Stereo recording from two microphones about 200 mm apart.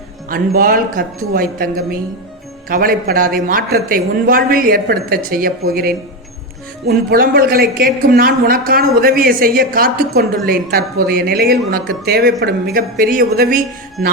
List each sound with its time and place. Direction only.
0.3 s a woman's voice: 45° right (ahead or behind)